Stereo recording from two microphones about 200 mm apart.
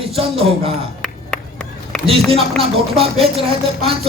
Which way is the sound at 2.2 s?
Centre (ahead or behind).